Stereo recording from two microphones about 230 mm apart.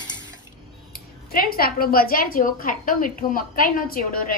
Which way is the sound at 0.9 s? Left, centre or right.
Left.